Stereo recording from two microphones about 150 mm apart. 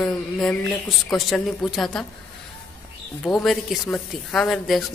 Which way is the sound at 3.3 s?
5° left (ahead or behind).